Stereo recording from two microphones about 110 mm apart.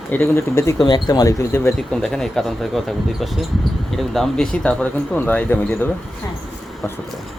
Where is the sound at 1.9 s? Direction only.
5° left (ahead or behind).